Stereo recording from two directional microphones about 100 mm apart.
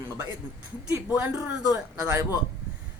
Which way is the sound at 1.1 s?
10° right (ahead or behind).